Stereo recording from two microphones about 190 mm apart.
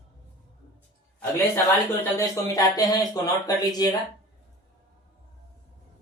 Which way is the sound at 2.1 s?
15° left (ahead or behind).